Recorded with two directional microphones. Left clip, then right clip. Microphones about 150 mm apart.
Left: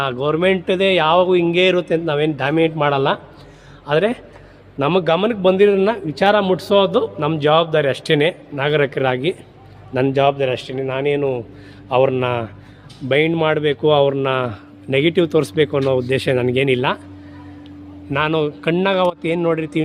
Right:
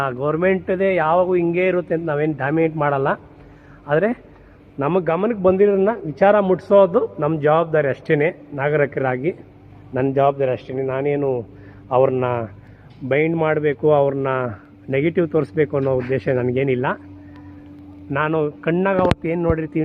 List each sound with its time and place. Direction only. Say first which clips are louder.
0.0 s a man's voice: left 2 dB; 5° left (ahead or behind)
4.8 s a man's voice: left 3 dB; 20° left (ahead or behind)
18.1 s speech: left 2 dB; 20° left (ahead or behind)